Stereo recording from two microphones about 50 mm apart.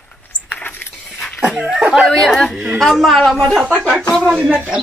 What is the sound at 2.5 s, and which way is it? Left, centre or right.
Speech, centre.